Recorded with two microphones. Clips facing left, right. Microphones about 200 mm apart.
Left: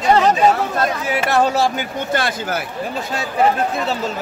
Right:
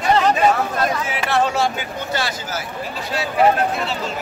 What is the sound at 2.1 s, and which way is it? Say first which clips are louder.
Speech: left 5 dB; 55° left (ahead or behind).